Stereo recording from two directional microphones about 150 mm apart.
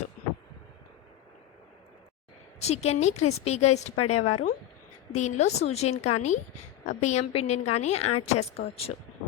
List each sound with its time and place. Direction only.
2.6 s a woman's voice: 45° left (ahead or behind)